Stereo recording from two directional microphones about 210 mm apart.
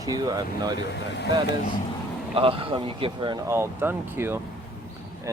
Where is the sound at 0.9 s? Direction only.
55° left (ahead or behind).